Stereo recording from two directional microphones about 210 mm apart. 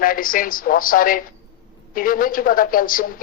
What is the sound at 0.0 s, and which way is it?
Speech, 40° left (ahead or behind).